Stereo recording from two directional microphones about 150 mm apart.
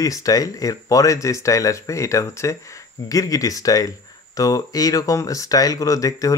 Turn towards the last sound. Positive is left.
turn(degrees=20)  # may be behind; listen again after turning